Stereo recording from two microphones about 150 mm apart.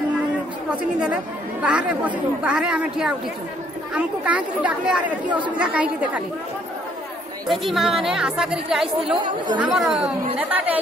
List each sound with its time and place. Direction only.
0.7 s speech: 5° right (ahead or behind)
7.4 s a woman's voice: centre (ahead or behind)